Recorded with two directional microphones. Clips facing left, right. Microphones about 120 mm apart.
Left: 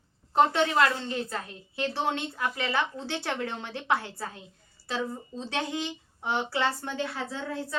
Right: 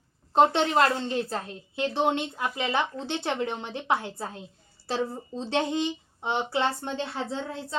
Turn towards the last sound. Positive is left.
turn(degrees=-25)  # may be behind; listen again after turning